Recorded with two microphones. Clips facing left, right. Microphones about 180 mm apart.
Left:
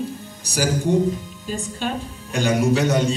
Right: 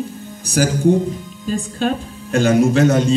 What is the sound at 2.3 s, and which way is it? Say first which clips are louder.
Speech: right 5 dB; 40° right (ahead or behind).